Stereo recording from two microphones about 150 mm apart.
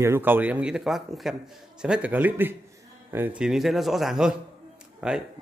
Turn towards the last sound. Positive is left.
turn(degrees=-5)  # may be behind; listen again after turning